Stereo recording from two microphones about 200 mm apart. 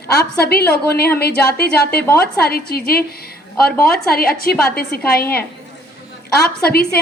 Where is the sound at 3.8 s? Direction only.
50° left (ahead or behind).